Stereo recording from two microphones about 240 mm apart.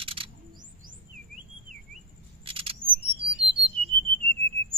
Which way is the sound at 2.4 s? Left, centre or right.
Right.